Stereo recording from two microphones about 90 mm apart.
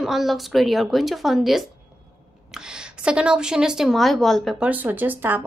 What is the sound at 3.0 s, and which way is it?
Speech, 10° right (ahead or behind).